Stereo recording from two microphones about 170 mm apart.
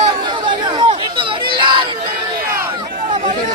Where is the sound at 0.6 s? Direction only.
25° right (ahead or behind).